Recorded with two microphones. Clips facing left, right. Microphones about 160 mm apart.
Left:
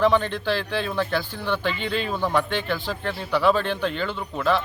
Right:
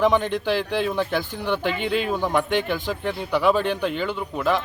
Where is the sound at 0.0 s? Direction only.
15° right (ahead or behind).